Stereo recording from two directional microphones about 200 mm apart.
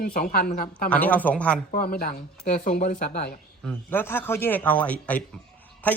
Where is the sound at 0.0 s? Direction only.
45° left (ahead or behind).